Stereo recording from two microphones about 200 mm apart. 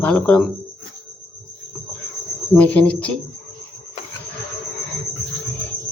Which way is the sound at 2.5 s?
10° left (ahead or behind).